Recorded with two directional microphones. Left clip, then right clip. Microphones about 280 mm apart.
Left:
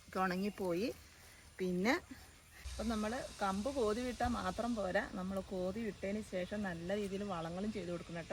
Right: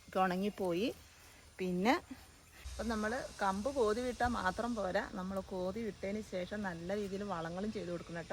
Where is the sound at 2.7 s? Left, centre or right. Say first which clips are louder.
Right 2 dB; centre.